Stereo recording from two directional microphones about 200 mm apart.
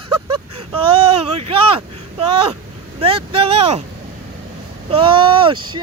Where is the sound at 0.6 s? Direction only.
30° right (ahead or behind).